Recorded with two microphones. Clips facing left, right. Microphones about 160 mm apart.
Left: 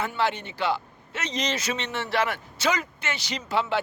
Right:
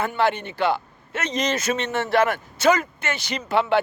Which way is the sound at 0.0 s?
55° right (ahead or behind).